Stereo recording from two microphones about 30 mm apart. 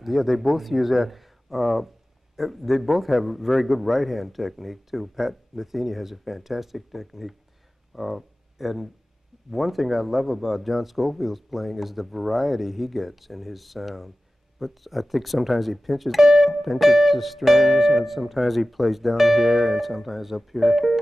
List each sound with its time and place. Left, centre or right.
0.0 s a man's voice: centre